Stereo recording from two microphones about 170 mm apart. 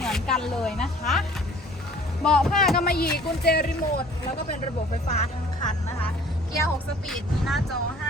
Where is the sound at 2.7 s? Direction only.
60° left (ahead or behind).